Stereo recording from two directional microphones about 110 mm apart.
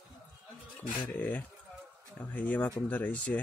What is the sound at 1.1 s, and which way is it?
Speech, 15° left (ahead or behind).